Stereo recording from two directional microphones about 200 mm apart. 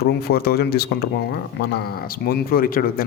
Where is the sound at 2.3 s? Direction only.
45° left (ahead or behind).